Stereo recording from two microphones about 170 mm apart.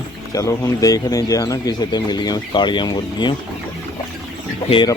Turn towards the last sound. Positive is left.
turn(degrees=25)  # may be behind; listen again after turning